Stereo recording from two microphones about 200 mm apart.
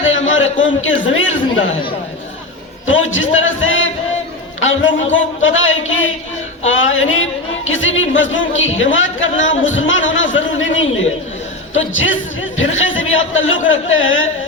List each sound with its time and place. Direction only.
0.0 s a man's voice: 70° left (ahead or behind)
2.8 s speech: 75° left (ahead or behind)